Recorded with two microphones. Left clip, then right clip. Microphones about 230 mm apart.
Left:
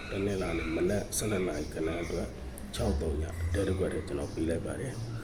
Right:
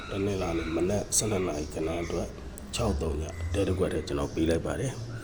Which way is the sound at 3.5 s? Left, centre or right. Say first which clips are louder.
Right 3 dB; right.